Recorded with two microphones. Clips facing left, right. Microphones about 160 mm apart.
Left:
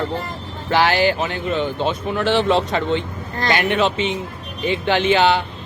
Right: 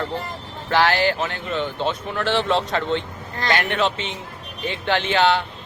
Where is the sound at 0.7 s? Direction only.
10° left (ahead or behind).